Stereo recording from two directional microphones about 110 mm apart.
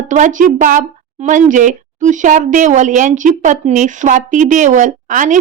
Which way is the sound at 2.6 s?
90° right.